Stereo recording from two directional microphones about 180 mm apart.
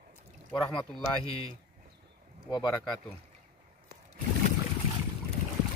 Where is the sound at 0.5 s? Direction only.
25° left (ahead or behind).